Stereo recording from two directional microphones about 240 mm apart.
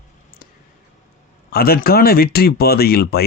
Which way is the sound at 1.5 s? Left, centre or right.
Left.